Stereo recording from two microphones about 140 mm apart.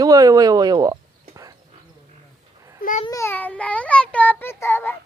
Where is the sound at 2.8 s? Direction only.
75° left (ahead or behind).